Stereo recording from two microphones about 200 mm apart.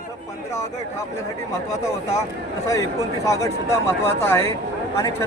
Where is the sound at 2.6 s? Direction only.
15° left (ahead or behind).